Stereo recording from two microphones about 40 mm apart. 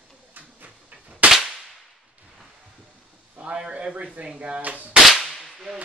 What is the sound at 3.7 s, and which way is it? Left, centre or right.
Speech, right.